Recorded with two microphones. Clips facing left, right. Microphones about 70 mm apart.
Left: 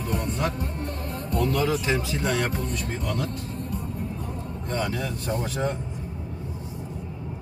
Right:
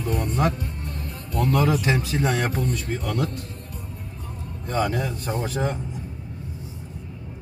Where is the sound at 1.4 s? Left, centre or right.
Right.